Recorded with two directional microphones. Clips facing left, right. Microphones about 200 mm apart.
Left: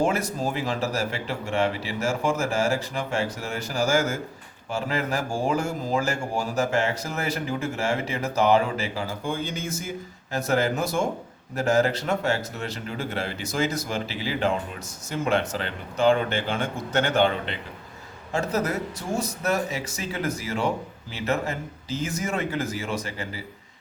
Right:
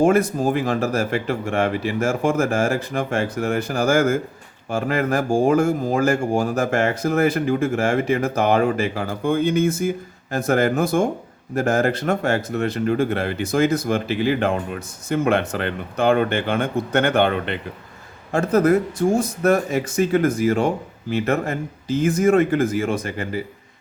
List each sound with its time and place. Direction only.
0.0 s speech: 55° right (ahead or behind)